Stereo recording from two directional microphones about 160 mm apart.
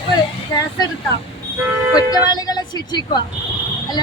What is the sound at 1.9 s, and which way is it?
Speech, 25° left (ahead or behind).